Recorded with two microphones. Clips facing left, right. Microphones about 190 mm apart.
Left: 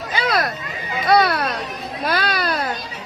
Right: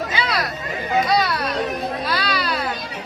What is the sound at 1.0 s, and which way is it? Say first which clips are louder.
Music: left 4 dB; 60° left (ahead or behind).